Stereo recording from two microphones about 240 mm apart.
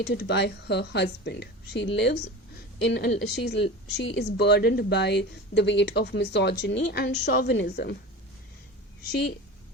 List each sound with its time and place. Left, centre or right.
0.0 s speech: left